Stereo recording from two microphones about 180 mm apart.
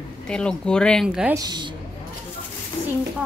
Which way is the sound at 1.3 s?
25° right (ahead or behind).